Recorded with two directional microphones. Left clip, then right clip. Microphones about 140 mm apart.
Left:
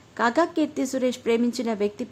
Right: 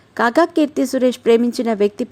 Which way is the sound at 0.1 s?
45° right (ahead or behind).